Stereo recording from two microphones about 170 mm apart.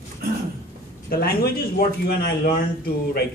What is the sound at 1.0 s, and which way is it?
Speech, 65° left (ahead or behind).